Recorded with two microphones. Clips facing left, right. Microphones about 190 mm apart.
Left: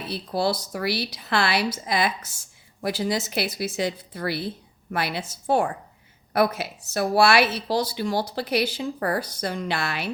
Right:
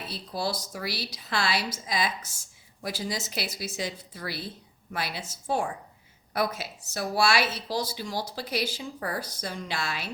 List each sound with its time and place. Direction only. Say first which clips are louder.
0.1 s speech: left 7 dB; 65° left (ahead or behind)